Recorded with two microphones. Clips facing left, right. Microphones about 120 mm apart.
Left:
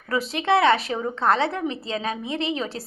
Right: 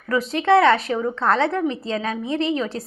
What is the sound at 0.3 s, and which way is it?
A woman's voice, 20° left (ahead or behind).